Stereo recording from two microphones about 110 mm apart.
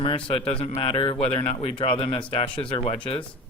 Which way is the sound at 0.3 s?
60° left (ahead or behind).